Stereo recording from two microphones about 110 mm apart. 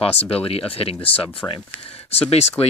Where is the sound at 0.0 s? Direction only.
60° left (ahead or behind).